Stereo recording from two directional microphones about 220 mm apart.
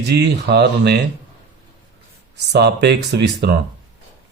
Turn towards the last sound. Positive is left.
turn(degrees=-50)  # may be behind; listen again after turning